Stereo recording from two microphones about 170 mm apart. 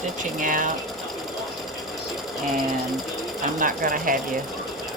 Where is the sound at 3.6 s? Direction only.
55° right (ahead or behind).